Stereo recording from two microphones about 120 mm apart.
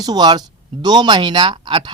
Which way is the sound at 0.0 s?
35° right (ahead or behind).